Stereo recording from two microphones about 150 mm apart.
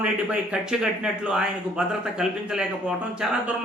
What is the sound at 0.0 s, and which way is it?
Speech, 5° right (ahead or behind).